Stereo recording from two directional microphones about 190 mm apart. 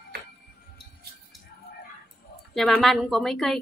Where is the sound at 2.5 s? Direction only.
Centre (ahead or behind).